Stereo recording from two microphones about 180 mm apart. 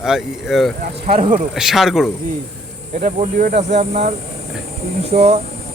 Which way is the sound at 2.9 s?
45° right (ahead or behind).